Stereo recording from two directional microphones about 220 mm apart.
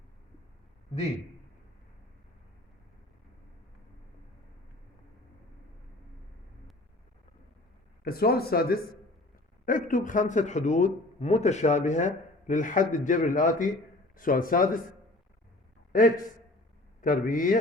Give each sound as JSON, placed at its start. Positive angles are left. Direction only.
{"t": 8.0, "sound": "a man's voice", "side_deg": 45}
{"t": 15.9, "sound": "a man's voice", "side_deg": 35}